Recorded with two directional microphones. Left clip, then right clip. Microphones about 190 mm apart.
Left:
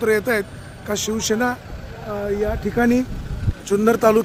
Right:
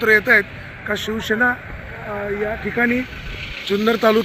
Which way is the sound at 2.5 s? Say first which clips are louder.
Right 2 dB; 40° left (ahead or behind).